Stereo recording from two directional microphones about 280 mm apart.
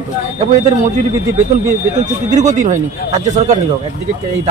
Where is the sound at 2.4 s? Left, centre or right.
Right.